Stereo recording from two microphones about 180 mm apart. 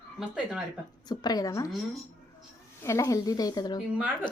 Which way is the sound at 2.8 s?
15° left (ahead or behind).